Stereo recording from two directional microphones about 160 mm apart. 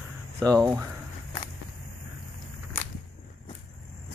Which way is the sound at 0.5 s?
20° right (ahead or behind).